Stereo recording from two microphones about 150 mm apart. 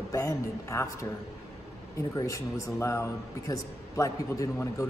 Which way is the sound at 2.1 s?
20° left (ahead or behind).